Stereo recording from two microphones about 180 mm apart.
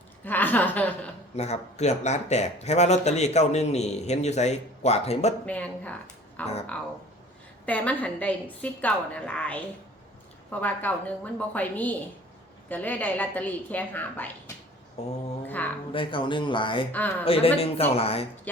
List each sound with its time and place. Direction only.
0.3 s a sound: 10° left (ahead or behind)
1.4 s speech: 35° left (ahead or behind)
5.5 s speech: 10° left (ahead or behind)
7.6 s a woman's voice: 5° left (ahead or behind)
15.9 s speech: 30° left (ahead or behind)
16.9 s a woman's voice: 10° left (ahead or behind)
17.2 s speech: 30° left (ahead or behind)